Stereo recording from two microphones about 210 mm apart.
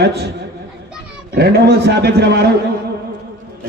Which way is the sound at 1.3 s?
50° right (ahead or behind).